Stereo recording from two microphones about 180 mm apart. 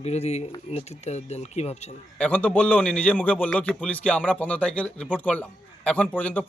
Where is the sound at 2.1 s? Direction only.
5° left (ahead or behind).